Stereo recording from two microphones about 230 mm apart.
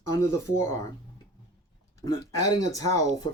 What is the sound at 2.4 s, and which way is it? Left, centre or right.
Speech, centre.